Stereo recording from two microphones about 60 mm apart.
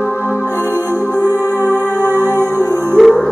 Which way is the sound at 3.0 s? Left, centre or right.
Centre.